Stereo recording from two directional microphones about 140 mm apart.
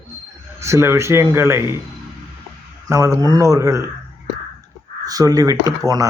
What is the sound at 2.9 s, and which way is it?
Speech, 20° right (ahead or behind).